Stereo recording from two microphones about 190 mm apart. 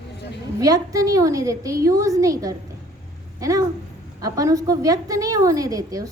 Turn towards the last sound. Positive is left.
turn(degrees=-20)  # may be behind; listen again after turning